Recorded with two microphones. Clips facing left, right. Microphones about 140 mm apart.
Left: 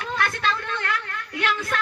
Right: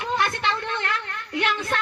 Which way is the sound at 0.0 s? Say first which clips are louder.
Right 1 dB; 20° right (ahead or behind).